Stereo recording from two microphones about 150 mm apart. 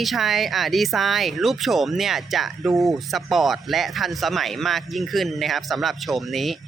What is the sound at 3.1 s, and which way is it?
Speech, centre (ahead or behind).